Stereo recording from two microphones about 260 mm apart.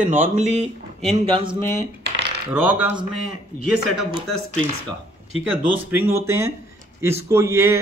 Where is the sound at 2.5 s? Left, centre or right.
Centre.